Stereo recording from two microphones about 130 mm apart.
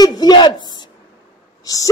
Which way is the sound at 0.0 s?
30° left (ahead or behind).